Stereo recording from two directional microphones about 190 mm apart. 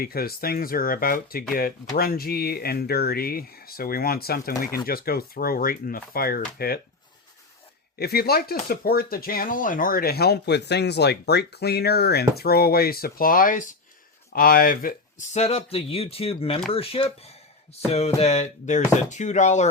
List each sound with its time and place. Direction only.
0.0 s speech: 55° left (ahead or behind)
7.9 s speech: 55° left (ahead or behind); by 19.6 s 40° left (ahead or behind)